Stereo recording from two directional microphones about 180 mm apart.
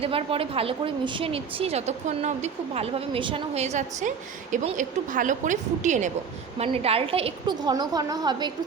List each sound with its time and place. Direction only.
0.0 s a woman's voice: 30° right (ahead or behind)